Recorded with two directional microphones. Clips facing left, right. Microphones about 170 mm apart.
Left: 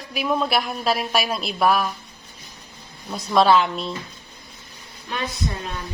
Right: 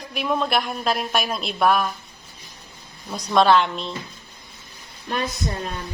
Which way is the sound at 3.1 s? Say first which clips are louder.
Even; centre (ahead or behind).